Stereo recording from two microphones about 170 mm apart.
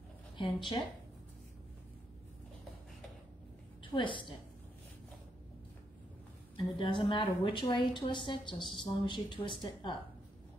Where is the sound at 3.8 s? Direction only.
30° left (ahead or behind).